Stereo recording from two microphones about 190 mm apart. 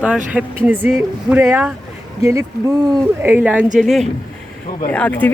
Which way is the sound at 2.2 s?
15° right (ahead or behind).